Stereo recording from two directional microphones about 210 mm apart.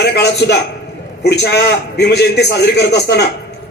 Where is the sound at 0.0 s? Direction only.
50° left (ahead or behind).